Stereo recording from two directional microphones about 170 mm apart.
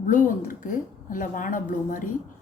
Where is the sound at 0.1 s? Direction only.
50° left (ahead or behind).